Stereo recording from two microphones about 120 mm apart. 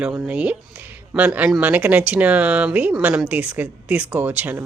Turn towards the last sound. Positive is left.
turn(degrees=-15)  # may be behind; listen again after turning